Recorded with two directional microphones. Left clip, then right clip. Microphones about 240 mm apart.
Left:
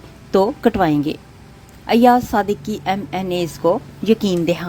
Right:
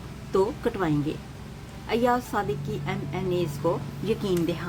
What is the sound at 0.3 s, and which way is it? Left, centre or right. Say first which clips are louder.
A woman's voice: left 9 dB; left.